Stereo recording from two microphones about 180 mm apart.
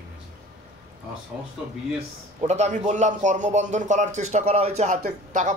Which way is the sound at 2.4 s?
40° right (ahead or behind).